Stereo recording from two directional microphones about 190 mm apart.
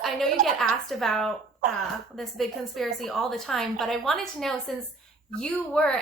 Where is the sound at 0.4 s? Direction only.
Centre (ahead or behind).